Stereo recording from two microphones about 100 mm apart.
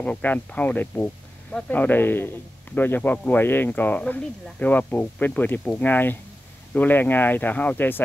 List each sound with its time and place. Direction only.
0.0 s speech: 15° left (ahead or behind)